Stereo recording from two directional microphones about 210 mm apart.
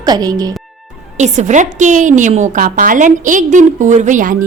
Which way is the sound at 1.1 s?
35° right (ahead or behind).